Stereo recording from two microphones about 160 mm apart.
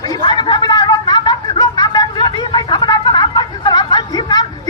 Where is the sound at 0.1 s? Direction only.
30° left (ahead or behind).